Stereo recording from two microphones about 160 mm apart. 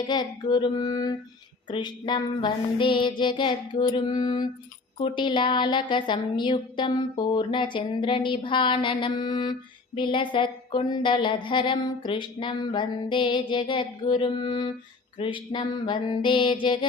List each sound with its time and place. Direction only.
0.1 s music: 25° left (ahead or behind)
4.9 s a woman's voice: 30° left (ahead or behind)